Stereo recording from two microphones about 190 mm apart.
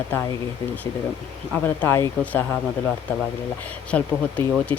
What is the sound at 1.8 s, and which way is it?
Speech, 10° left (ahead or behind).